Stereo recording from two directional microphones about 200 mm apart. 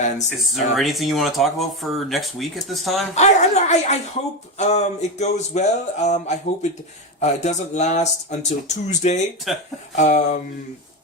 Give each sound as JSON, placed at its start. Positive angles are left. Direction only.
{"t": 0.3, "sound": "speech", "side_deg": 0}
{"t": 3.2, "sound": "speech", "side_deg": 35}
{"t": 9.5, "sound": "speech", "side_deg": 0}
{"t": 9.9, "sound": "speech", "side_deg": 35}